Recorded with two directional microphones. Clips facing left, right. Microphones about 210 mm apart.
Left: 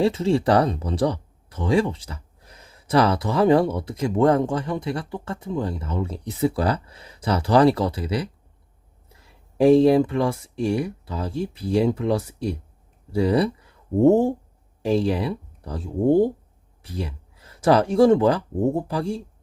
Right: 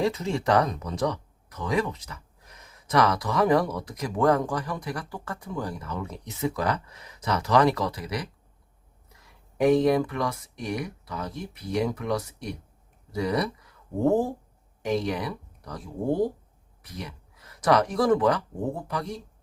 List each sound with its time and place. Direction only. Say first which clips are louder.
0.0 s speech: left 6 dB; 30° left (ahead or behind)